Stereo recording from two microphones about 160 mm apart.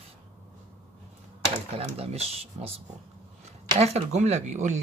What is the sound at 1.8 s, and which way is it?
Speech, 40° right (ahead or behind).